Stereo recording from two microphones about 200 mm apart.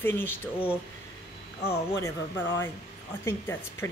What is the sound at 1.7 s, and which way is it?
A woman's voice, 15° left (ahead or behind).